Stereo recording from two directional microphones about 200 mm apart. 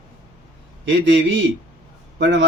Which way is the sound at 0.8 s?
65° right (ahead or behind).